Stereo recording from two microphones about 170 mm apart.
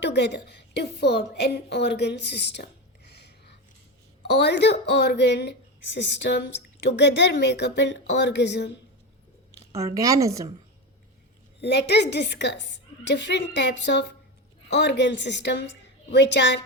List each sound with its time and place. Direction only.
0.0 s a woman's voice: 90° left
3.1 s a sound: 75° left (ahead or behind)
4.3 s speech: 85° left
9.6 s a woman's voice: 20° right (ahead or behind)
11.6 s speech: 80° left